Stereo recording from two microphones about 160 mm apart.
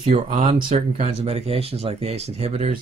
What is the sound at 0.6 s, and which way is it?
Speech, 45° right (ahead or behind).